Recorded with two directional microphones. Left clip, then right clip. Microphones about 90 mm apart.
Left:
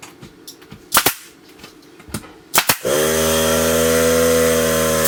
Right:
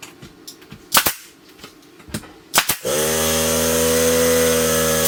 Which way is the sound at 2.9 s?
5° left (ahead or behind).